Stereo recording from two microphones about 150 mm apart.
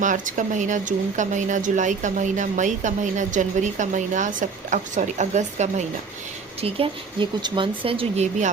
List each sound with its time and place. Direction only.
0.0 s speech: 60° right (ahead or behind)
6.6 s speech: 40° right (ahead or behind)